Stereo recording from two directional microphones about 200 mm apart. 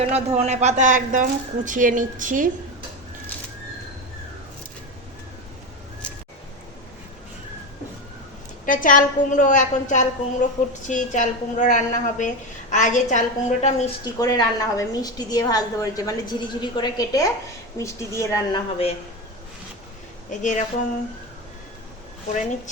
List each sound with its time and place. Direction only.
0.0 s a woman's voice: 30° right (ahead or behind)
8.6 s a woman's voice: 40° left (ahead or behind)
14.0 s a woman's voice: 20° left (ahead or behind)
20.4 s a woman's voice: 40° left (ahead or behind)